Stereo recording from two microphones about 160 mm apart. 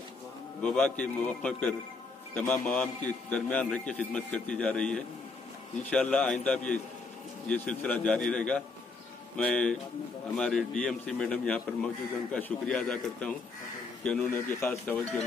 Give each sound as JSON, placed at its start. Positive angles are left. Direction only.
{"t": 0.6, "sound": "a man's voice", "side_deg": 5}